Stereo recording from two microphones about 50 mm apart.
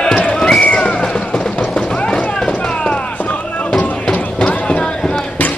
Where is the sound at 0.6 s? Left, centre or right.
Left.